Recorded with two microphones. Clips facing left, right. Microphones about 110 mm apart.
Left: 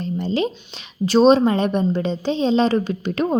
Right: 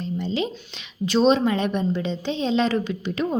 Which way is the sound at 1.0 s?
40° left (ahead or behind).